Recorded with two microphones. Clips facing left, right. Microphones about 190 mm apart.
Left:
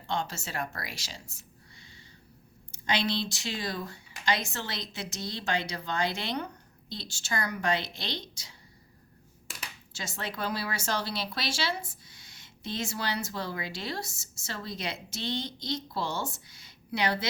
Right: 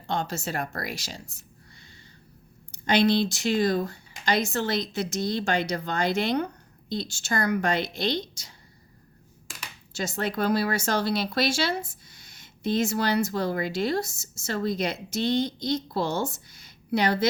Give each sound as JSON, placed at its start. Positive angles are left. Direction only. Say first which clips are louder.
{"t": 0.1, "sound": "speech", "louder": "right 4 dB", "side_deg": -40}
{"t": 2.8, "sound": "speech", "louder": "right 8 dB", "side_deg": -50}
{"t": 10.0, "sound": "speech", "louder": "right 8 dB", "side_deg": -45}